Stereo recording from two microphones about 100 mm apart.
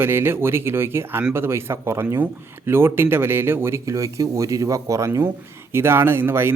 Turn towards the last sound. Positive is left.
turn(degrees=-25)  # may be behind; listen again after turning